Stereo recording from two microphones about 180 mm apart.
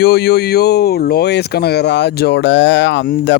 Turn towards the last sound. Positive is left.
turn(degrees=80)